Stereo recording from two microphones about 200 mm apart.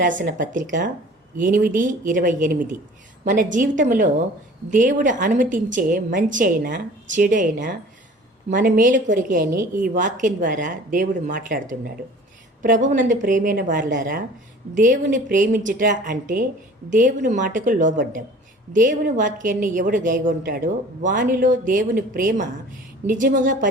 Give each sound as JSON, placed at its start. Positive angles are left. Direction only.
{"t": 0.0, "sound": "a woman's voice", "side_deg": -40}